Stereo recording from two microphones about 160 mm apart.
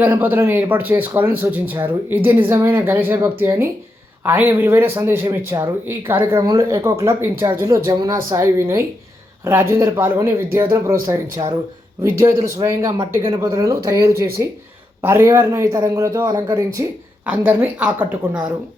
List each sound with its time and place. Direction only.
0.0 s speech: 10° right (ahead or behind)
17.2 s speech: 10° right (ahead or behind)